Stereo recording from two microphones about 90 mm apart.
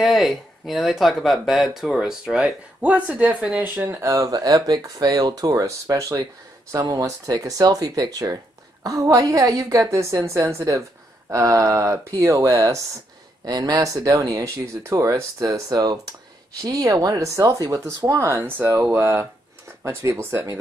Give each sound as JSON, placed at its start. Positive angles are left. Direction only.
{"t": 0.0, "sound": "speech", "side_deg": 0}
{"t": 4.0, "sound": "speech", "side_deg": -35}
{"t": 14.4, "sound": "speech", "side_deg": -30}